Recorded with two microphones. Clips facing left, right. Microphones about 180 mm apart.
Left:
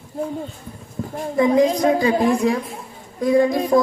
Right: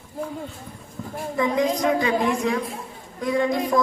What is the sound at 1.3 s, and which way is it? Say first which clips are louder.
A woman's voice: left 6 dB; 35° left (ahead or behind).